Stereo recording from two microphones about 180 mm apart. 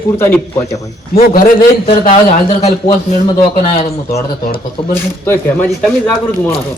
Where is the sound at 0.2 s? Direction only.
10° left (ahead or behind).